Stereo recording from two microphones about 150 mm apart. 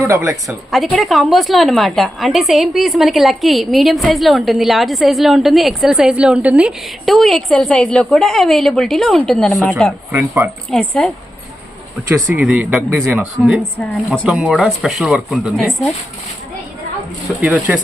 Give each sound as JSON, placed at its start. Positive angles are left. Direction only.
{"t": 0.0, "sound": "a woman's voice", "side_deg": -20}
{"t": 0.4, "sound": "a woman's voice", "side_deg": 0}
{"t": 10.1, "sound": "speech", "side_deg": -15}
{"t": 10.7, "sound": "a woman's voice", "side_deg": 5}
{"t": 12.3, "sound": "a woman's voice", "side_deg": -5}
{"t": 17.4, "sound": "speech", "side_deg": -10}